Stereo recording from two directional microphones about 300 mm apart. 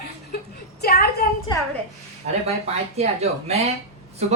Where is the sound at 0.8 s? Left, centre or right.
Left.